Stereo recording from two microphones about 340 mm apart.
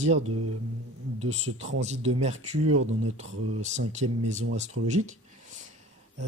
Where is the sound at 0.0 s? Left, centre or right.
Centre.